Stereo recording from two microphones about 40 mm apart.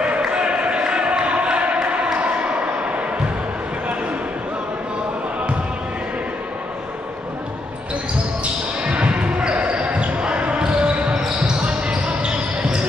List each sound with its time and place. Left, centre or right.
0.2 s a sound: right
2.1 s basketball bounce: right
8.8 s basketball bounce: right